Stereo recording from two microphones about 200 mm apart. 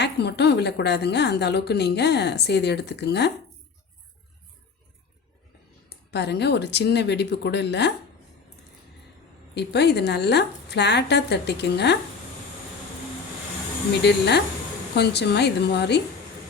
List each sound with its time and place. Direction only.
0.0 s a woman's voice: 55° left (ahead or behind)
5.9 s a woman's voice: 55° left (ahead or behind)
9.6 s a woman's voice: 55° left (ahead or behind)
14.0 s a woman's voice: 60° left (ahead or behind)